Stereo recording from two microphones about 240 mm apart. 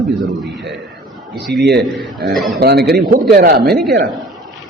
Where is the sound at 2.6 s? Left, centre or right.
Right.